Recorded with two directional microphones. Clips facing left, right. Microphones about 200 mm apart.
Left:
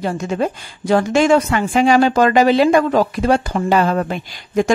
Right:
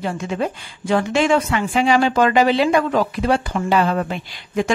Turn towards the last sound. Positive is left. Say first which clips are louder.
# left 4 dB
turn(degrees=45)  # may be behind; listen again after turning